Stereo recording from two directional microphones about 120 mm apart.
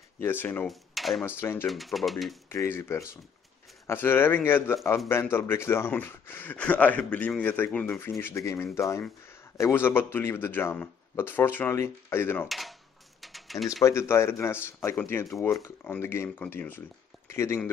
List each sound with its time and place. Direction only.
0.2 s speech: 15° left (ahead or behind)
0.7 s speech: centre (ahead or behind)
1.4 s speech: 20° left (ahead or behind)
1.7 s speech: centre (ahead or behind)
2.5 s speech: 20° left (ahead or behind)
12.4 s speech: centre (ahead or behind)
13.2 s typing: centre (ahead or behind)
13.8 s a man's voice: 20° left (ahead or behind)